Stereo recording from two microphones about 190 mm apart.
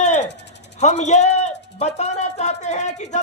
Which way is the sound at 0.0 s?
40° left (ahead or behind).